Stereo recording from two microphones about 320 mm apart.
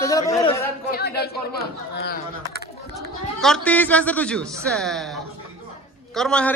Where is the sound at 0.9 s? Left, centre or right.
Left.